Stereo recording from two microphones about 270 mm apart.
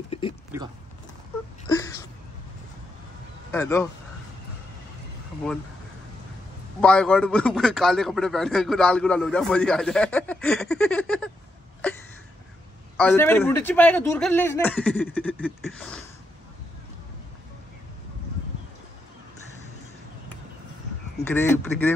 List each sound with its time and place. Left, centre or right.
0.1 s a sound: left
0.5 s speech: centre
1.7 s wail: centre
3.5 s speech: centre
6.8 s a man's voice: centre
12.9 s a man's voice: centre
21.3 s speech: centre